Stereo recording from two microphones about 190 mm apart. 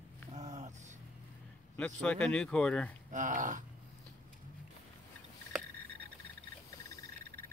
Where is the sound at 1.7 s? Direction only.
5° left (ahead or behind).